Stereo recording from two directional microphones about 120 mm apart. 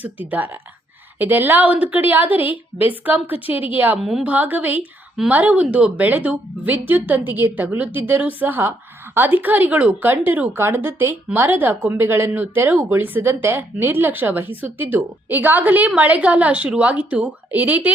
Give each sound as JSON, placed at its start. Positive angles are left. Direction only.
{"t": 0.0, "sound": "speech", "side_deg": -15}
{"t": 4.0, "sound": "a woman's voice", "side_deg": -5}
{"t": 4.3, "sound": "speech", "side_deg": -15}